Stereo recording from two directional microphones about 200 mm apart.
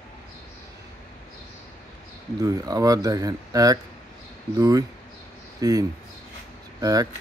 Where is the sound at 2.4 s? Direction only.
20° right (ahead or behind).